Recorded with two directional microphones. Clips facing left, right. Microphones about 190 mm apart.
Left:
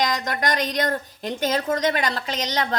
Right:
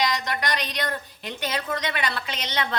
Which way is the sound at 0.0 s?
45° left (ahead or behind).